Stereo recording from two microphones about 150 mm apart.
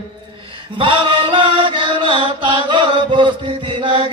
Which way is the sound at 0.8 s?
35° right (ahead or behind).